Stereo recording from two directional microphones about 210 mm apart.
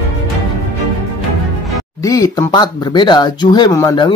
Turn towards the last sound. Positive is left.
turn(degrees=15)  # may be behind; listen again after turning